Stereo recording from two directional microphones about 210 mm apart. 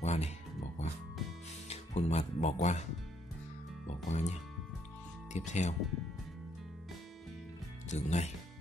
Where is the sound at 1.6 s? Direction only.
30° left (ahead or behind).